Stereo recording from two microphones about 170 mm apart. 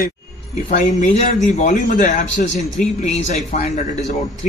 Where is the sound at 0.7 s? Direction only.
45° left (ahead or behind).